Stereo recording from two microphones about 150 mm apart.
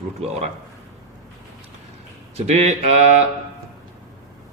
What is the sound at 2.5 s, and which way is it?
Speech, 45° right (ahead or behind).